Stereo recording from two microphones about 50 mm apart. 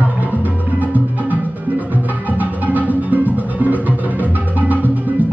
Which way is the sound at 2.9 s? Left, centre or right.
Right.